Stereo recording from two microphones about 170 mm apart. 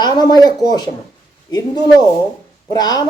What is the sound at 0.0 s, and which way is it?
Speech, 25° left (ahead or behind).